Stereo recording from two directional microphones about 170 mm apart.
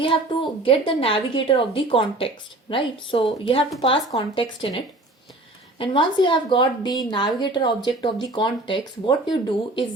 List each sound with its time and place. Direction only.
0.6 s a woman's voice: 30° left (ahead or behind)
5.8 s speech: 30° left (ahead or behind)